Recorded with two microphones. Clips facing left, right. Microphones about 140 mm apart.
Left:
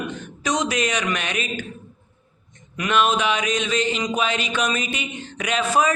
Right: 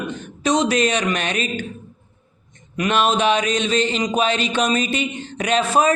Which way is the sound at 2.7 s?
30° right (ahead or behind).